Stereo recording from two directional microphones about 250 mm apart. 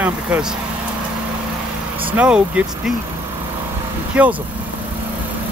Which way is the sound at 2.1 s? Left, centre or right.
Centre.